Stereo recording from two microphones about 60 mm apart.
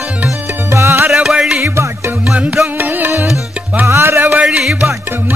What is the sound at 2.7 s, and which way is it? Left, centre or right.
Music, right.